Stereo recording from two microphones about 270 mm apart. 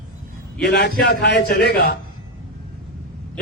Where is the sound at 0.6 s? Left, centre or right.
Left.